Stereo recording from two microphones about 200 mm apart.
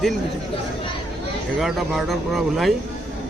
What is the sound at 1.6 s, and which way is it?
Speech, centre (ahead or behind).